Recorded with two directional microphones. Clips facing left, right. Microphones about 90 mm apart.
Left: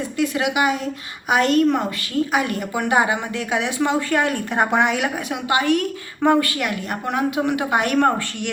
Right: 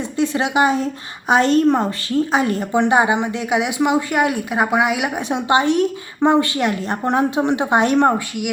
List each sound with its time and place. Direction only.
0.2 s a woman's voice: 30° right (ahead or behind); by 5.1 s 10° right (ahead or behind)
5.1 s a woman's voice: 25° right (ahead or behind)